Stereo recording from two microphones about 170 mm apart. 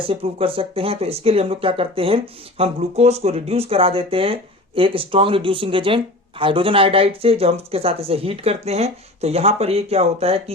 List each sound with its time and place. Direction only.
0.0 s speech: 35° right (ahead or behind)